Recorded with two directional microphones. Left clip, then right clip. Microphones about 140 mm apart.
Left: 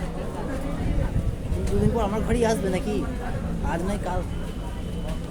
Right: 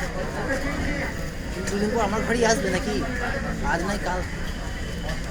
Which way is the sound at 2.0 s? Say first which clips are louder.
Right 3 dB; 25° left (ahead or behind).